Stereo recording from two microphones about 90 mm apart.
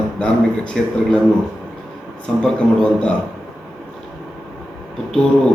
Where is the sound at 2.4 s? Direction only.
10° left (ahead or behind).